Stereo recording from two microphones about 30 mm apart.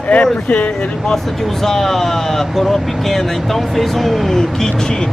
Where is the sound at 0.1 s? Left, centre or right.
Left.